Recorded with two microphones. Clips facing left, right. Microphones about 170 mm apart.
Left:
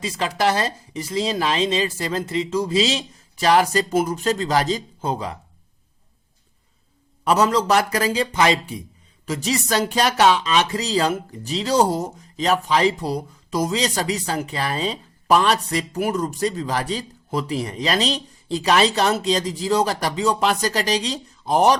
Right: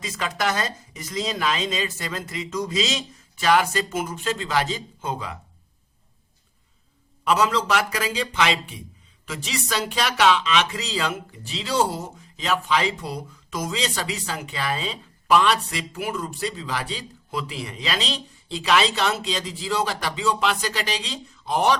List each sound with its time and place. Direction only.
0.0 s speech: 35° left (ahead or behind)
7.3 s speech: 40° left (ahead or behind)